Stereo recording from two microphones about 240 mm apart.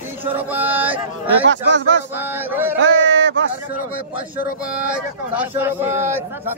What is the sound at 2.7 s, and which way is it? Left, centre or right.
Speech, right.